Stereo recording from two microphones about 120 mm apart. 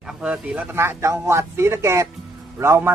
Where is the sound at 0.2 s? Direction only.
10° right (ahead or behind).